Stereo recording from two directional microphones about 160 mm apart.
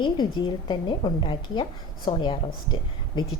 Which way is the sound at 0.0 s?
30° left (ahead or behind).